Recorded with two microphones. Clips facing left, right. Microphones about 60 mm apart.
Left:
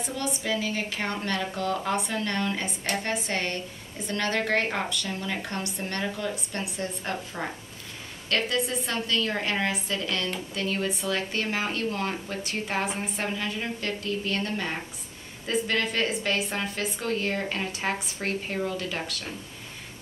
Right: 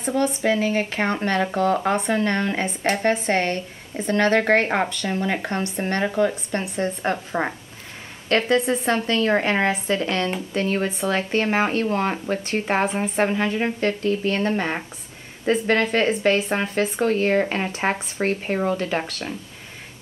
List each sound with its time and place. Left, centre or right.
0.0 s a woman's voice: right